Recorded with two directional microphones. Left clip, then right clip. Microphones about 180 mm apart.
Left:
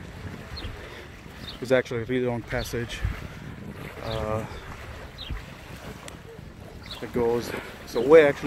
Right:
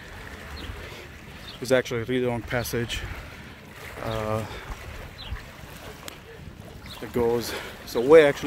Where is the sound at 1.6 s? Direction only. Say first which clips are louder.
Even; 35° right (ahead or behind).